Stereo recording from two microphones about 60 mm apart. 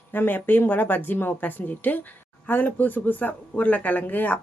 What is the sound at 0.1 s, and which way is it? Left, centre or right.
A woman's voice, left.